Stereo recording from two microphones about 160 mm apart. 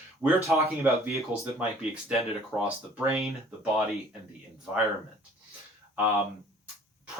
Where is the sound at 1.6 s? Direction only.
5° right (ahead or behind).